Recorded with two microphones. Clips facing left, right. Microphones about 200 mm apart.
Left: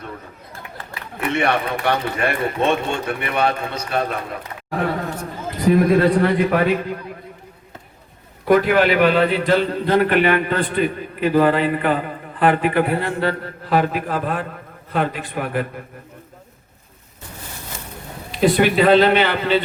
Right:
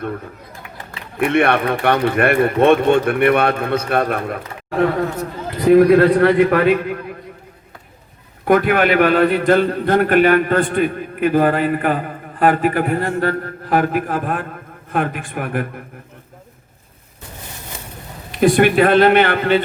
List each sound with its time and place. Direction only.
1.2 s speech: 55° right (ahead or behind)
5.6 s speech: 65° right (ahead or behind)
8.4 s a man's voice: 55° right (ahead or behind)
18.3 s a man's voice: 50° right (ahead or behind)